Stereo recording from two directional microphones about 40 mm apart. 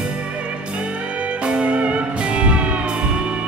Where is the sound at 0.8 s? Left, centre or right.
Right.